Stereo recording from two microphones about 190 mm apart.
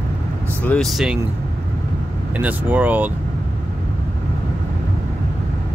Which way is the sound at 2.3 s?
10° right (ahead or behind).